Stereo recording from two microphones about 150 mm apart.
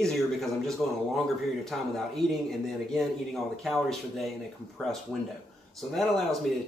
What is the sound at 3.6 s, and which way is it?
Speech, centre (ahead or behind).